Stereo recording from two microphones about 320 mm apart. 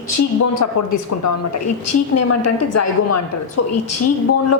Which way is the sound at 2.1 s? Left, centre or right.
Left.